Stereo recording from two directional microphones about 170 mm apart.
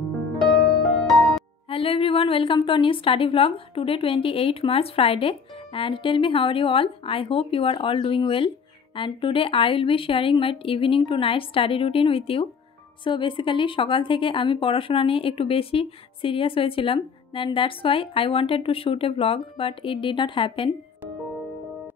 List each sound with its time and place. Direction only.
1.7 s a woman's voice: 35° left (ahead or behind)